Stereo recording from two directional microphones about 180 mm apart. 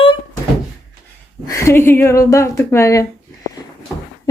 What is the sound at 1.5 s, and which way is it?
Speech, 15° left (ahead or behind).